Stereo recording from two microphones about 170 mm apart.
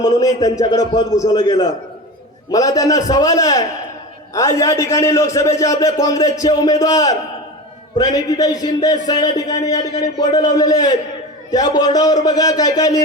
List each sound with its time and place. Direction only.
0.0 s a man's voice: 20° left (ahead or behind)
2.5 s a man's voice: 20° left (ahead or behind)